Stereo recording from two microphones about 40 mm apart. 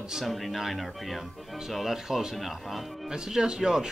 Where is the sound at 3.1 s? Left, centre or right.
Centre.